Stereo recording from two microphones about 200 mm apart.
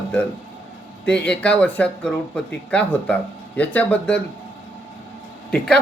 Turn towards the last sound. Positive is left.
turn(degrees=5)  # may be behind; listen again after turning